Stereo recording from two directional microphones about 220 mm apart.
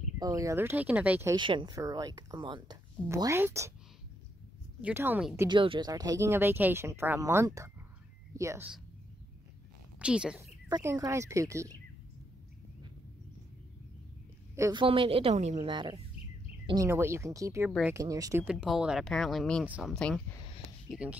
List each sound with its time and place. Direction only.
0.2 s speech: 15° right (ahead or behind)
1.3 s speech: 20° right (ahead or behind)
4.8 s speech: 10° right (ahead or behind)
9.9 s speech: 5° right (ahead or behind)
14.5 s a woman's voice: 15° right (ahead or behind)